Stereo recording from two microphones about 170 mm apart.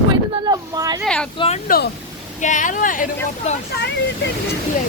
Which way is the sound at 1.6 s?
60° left (ahead or behind).